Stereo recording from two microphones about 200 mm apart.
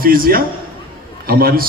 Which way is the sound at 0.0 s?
45° right (ahead or behind).